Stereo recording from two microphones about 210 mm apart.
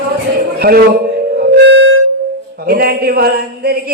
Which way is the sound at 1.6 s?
55° right (ahead or behind).